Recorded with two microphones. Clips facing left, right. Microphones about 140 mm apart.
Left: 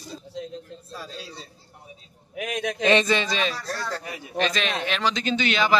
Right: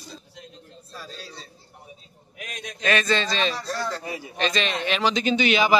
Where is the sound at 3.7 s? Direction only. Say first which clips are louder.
Right 2 dB; 25° right (ahead or behind).